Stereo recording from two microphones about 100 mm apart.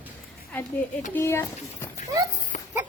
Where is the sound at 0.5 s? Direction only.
15° left (ahead or behind).